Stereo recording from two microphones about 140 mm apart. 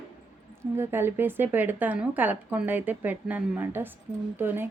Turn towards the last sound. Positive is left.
turn(degrees=-15)  # may be behind; listen again after turning